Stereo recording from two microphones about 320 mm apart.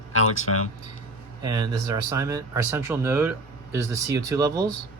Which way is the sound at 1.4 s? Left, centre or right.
Centre.